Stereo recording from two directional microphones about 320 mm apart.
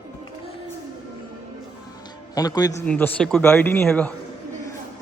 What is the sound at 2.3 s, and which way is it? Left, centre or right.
A man's voice, centre.